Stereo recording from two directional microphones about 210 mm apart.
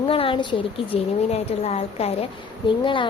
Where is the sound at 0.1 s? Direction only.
25° left (ahead or behind).